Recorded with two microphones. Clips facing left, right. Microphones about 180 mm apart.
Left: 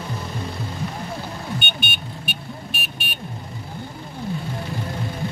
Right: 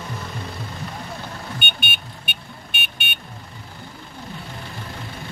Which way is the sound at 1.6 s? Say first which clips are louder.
Left 2 dB; 55° right (ahead or behind).